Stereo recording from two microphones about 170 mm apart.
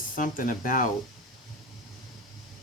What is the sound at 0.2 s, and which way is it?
Speech, 55° left (ahead or behind).